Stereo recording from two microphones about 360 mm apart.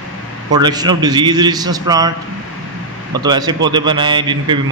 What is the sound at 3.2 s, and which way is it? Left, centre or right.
Speech, centre.